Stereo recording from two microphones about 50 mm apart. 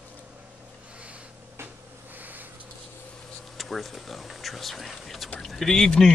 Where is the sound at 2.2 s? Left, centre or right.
Right.